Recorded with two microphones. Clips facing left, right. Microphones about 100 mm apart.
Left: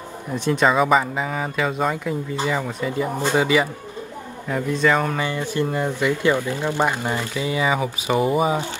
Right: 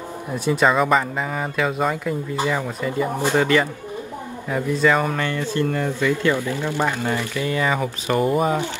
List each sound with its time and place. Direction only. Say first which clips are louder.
0.5 s speech: even; centre (ahead or behind)
4.5 s speech: right 1 dB; 5° right (ahead or behind)
5.2 s speech: right 1 dB; 15° left (ahead or behind)